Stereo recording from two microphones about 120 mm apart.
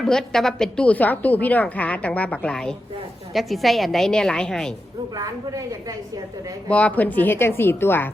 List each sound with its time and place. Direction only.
0.0 s a woman's voice: 5° left (ahead or behind)
5.1 s a woman's voice: 30° right (ahead or behind)
6.7 s a woman's voice: 10° left (ahead or behind)